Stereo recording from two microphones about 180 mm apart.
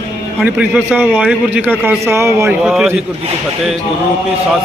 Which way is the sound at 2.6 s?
5° right (ahead or behind).